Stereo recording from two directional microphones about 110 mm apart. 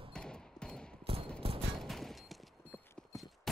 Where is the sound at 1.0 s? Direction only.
60° right (ahead or behind).